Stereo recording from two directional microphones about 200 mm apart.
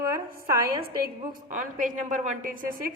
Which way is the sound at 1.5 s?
40° right (ahead or behind).